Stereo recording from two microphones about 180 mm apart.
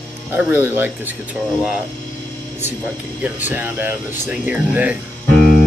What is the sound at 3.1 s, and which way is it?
Speech, 10° right (ahead or behind).